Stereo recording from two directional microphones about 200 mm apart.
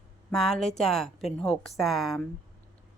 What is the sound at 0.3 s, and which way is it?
A woman's voice, centre (ahead or behind).